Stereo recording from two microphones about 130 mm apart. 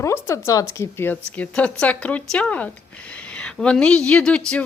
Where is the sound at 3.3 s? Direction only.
5° left (ahead or behind).